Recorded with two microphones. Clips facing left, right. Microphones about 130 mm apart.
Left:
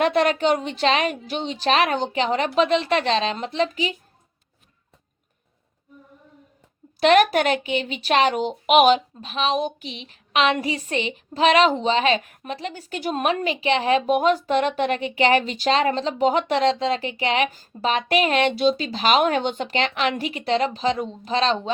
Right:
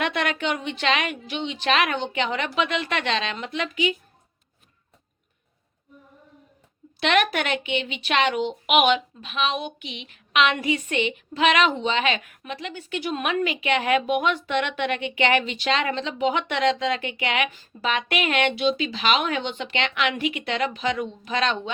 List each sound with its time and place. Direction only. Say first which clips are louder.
0.0 s a woman's voice: left 6 dB; 35° left (ahead or behind)
7.0 s a woman's voice: left 6 dB; 40° left (ahead or behind)